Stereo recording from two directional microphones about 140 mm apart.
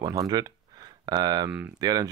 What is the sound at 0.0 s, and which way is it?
Speech, 25° right (ahead or behind).